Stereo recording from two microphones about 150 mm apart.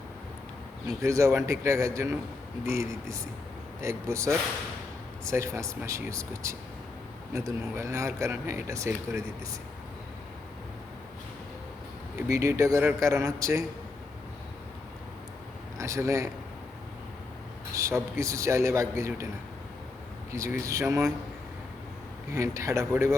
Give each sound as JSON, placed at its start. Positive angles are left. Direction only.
{"t": 0.9, "sound": "speech", "side_deg": -20}
{"t": 12.3, "sound": "speech", "side_deg": -20}
{"t": 15.8, "sound": "speech", "side_deg": -20}
{"t": 17.7, "sound": "speech", "side_deg": -20}
{"t": 20.3, "sound": "speech", "side_deg": -20}
{"t": 22.3, "sound": "speech", "side_deg": -20}